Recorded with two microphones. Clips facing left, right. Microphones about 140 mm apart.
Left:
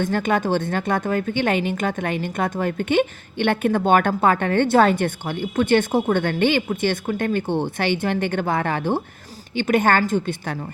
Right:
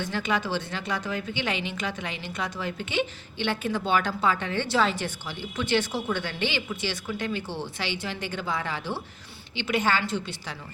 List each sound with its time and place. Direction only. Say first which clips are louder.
0.0 s a woman's voice: left 7 dB; 50° left (ahead or behind)